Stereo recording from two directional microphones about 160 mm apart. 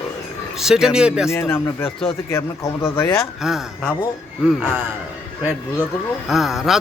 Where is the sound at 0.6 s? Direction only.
5° right (ahead or behind).